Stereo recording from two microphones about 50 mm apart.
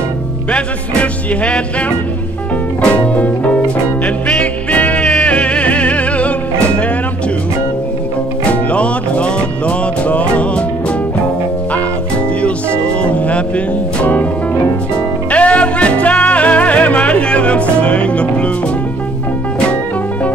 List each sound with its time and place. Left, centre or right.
0.5 s music: left
2.8 s music: left
8.5 s music: left
12.4 s music: left
15.3 s music: left